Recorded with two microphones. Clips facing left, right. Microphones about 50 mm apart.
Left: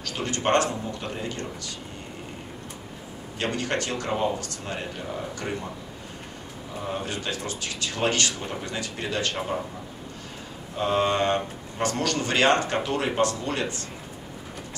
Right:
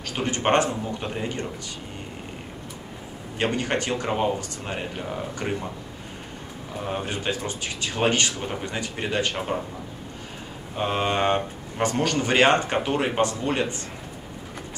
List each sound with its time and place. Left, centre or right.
0.0 s speech: right
3.3 s speech: right
6.9 s speech: right
10.8 s speech: right